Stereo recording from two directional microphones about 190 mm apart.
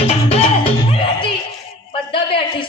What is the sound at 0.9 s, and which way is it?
Music, 25° left (ahead or behind).